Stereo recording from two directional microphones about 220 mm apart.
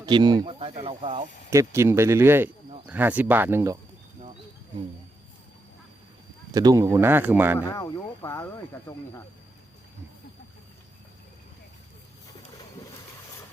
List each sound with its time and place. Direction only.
0.0 s speech: 20° right (ahead or behind)
1.5 s speech: 10° right (ahead or behind)
6.5 s speech: 15° right (ahead or behind)
7.6 s speech: 15° left (ahead or behind)